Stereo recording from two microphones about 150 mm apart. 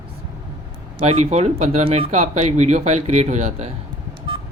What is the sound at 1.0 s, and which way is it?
Speech, 45° right (ahead or behind).